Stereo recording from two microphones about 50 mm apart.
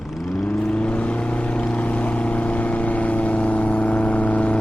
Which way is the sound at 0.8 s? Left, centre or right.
Left.